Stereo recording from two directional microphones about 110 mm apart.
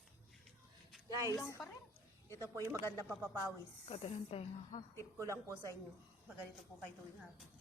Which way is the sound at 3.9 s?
60° left (ahead or behind).